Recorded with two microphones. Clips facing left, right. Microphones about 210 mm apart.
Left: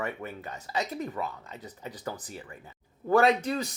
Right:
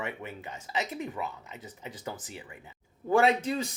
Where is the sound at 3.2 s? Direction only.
30° right (ahead or behind).